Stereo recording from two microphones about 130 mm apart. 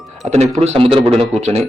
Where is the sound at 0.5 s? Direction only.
55° right (ahead or behind).